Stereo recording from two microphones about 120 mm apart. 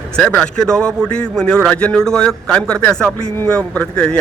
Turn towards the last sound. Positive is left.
turn(degrees=10)  # may be behind; listen again after turning